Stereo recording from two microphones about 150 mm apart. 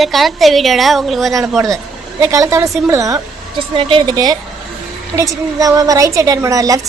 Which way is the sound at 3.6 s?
35° right (ahead or behind).